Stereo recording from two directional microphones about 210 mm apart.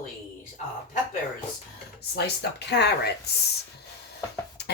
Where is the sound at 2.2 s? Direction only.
50° left (ahead or behind).